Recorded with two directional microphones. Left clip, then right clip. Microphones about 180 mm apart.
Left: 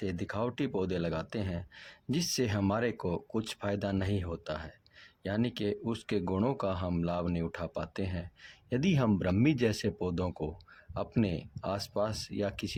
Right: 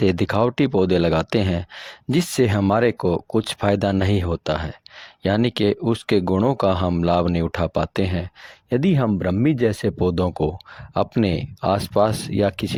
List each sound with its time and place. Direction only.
0.0 s speech: 50° right (ahead or behind)